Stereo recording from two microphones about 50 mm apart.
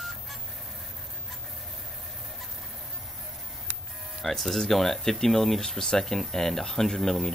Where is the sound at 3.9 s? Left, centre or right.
Centre.